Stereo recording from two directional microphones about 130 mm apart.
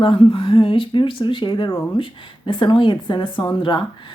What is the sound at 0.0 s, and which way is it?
Speech, 45° left (ahead or behind).